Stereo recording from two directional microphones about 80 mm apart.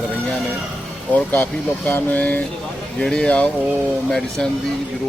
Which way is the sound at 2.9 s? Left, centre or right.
Centre.